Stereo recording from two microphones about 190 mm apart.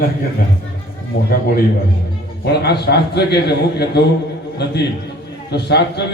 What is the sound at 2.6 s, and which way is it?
A man's voice, 60° left (ahead or behind).